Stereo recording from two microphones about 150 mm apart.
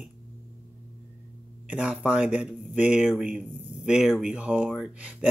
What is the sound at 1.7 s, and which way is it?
Speech, 10° right (ahead or behind).